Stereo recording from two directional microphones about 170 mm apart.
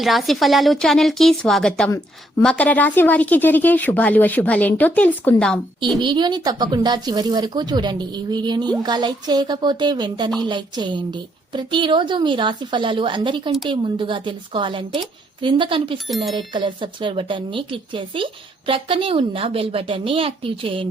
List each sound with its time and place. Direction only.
0.0 s a woman's voice: centre (ahead or behind)
6.0 s a woman's voice: 25° right (ahead or behind)
16.0 s a woman's voice: centre (ahead or behind)
16.4 s speech: 30° right (ahead or behind)